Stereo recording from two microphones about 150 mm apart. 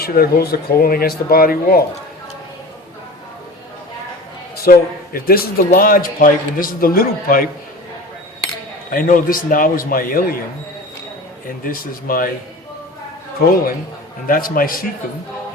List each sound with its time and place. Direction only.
0.0 s speech: 90° left
4.5 s a man's voice: 85° left
8.9 s a man's voice: 65° left (ahead or behind)
11.6 s a man's voice: 70° left (ahead or behind)
14.3 s a man's voice: 70° left (ahead or behind)